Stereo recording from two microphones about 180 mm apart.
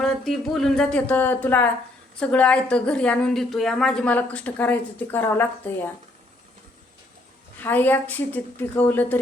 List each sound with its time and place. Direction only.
0.0 s a woman's voice: centre (ahead or behind)
7.6 s a woman's voice: 10° left (ahead or behind)